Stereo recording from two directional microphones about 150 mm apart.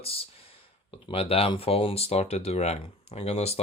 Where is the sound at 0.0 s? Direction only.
40° left (ahead or behind).